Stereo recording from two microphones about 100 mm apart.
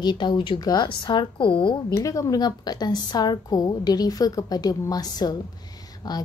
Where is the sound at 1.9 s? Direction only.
35° left (ahead or behind).